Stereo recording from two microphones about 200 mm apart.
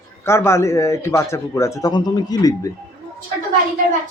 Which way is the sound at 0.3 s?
15° left (ahead or behind).